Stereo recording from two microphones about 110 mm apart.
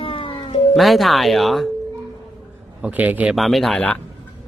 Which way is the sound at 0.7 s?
Centre (ahead or behind).